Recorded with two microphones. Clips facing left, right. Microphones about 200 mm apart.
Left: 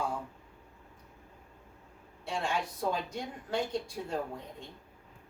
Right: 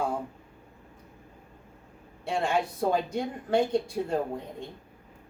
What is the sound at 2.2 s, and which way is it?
Speech, 55° right (ahead or behind).